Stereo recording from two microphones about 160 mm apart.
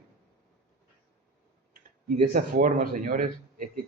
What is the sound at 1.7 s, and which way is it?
Speech, 60° right (ahead or behind).